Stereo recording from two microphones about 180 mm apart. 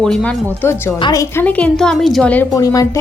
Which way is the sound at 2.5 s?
20° left (ahead or behind).